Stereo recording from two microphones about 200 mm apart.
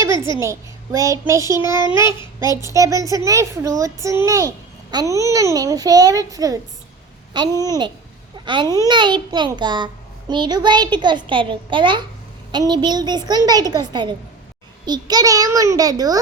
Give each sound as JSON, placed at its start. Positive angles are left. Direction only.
{"t": 0.0, "sound": "a woman's voice", "side_deg": -15}